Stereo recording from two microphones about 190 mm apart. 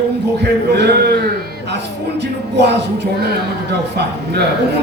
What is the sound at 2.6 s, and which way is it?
Speech, 60° right (ahead or behind).